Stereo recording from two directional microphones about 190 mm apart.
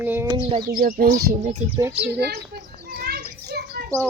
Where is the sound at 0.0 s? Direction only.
10° right (ahead or behind).